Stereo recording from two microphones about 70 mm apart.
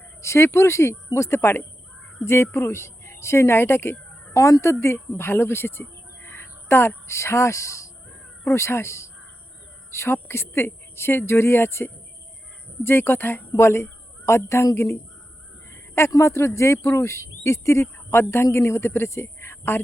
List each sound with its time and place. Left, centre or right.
0.2 s speech: left
4.4 s speech: left